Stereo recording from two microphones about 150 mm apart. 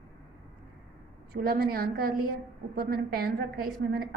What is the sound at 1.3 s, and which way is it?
A woman's voice, 80° right.